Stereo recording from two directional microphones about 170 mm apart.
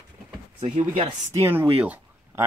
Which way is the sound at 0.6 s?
45° right (ahead or behind).